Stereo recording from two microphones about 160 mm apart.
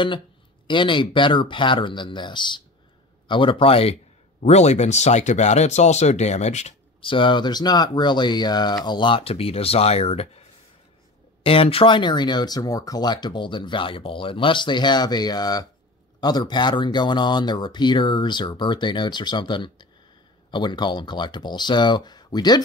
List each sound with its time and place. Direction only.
0.7 s speech: 30° left (ahead or behind)
11.4 s speech: 35° left (ahead or behind)